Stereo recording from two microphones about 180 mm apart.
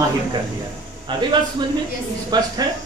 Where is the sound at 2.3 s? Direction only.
25° right (ahead or behind).